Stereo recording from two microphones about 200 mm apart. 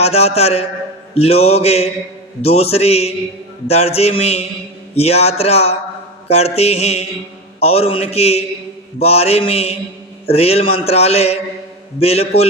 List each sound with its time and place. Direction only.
0.0 s a man's voice: 30° left (ahead or behind)